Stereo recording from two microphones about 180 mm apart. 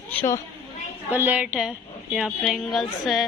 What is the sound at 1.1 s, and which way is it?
A man's voice, 10° right (ahead or behind).